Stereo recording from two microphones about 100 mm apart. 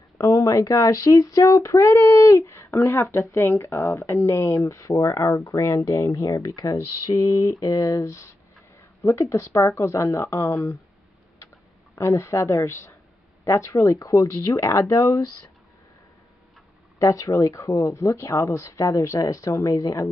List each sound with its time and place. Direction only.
0.2 s speech: 35° left (ahead or behind)
11.9 s speech: 25° left (ahead or behind)
13.4 s a sound: 30° left (ahead or behind)
13.7 s speech: 35° left (ahead or behind)
17.0 s speech: 30° left (ahead or behind)